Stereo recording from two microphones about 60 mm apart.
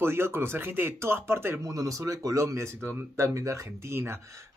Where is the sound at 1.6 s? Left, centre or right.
Right.